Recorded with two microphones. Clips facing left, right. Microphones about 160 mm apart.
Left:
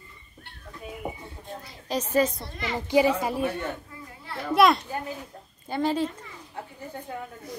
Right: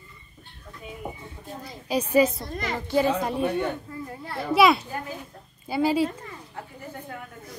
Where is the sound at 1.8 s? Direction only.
10° right (ahead or behind).